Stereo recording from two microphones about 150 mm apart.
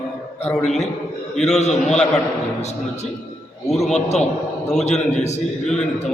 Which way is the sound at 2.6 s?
45° left (ahead or behind).